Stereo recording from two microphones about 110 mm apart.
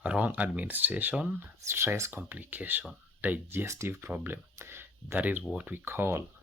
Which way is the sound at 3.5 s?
25° right (ahead or behind).